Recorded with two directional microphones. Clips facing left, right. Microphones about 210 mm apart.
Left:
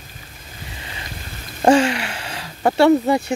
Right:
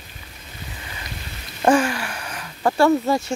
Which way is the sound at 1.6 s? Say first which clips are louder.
Left 3 dB; 25° left (ahead or behind).